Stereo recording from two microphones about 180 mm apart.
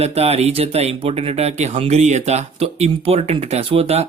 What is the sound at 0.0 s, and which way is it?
Speech, 35° right (ahead or behind).